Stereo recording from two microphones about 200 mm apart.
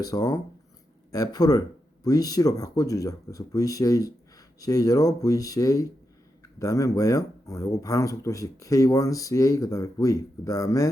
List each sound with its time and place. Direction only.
0.0 s speech: 20° left (ahead or behind)